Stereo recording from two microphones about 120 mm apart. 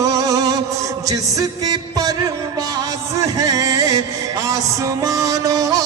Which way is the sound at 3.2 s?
30° right (ahead or behind).